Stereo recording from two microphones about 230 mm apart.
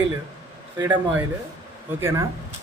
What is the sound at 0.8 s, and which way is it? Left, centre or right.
Speech, centre.